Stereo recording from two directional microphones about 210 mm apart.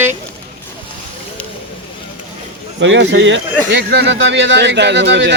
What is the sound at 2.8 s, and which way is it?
Speech, 60° right (ahead or behind).